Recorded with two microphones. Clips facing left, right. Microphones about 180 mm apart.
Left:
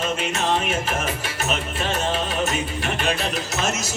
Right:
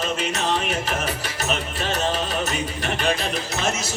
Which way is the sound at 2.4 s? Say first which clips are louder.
Left 2 dB; 40° right (ahead or behind).